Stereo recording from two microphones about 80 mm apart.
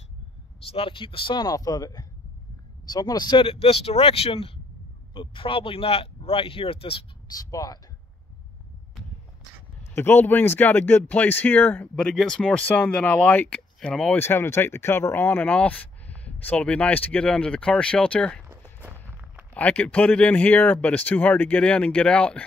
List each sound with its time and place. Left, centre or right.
0.8 s speech: left
5.1 s speech: left
7.2 s speech: left
9.9 s speech: left
11.9 s speech: centre
12.6 s speech: centre
14.1 s speech: left; by 18.4 s centre
18.8 s a sound: right
19.5 s speech: centre